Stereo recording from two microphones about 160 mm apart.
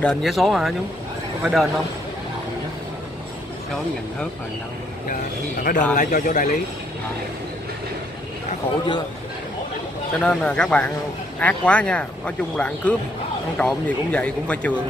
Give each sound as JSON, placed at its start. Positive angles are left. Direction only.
{"t": 0.0, "sound": "speech", "side_deg": 0}
{"t": 5.6, "sound": "a man's voice", "side_deg": 60}
{"t": 10.2, "sound": "speech", "side_deg": 5}